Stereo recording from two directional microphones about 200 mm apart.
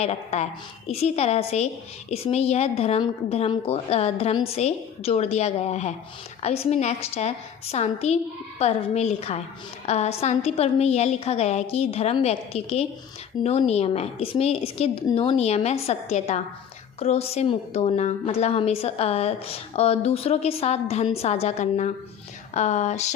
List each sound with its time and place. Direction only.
0.0 s a woman's voice: 35° left (ahead or behind)